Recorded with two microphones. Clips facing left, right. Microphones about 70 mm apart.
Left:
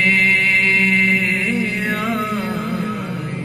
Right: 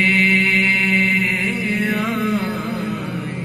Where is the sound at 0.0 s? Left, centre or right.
Centre.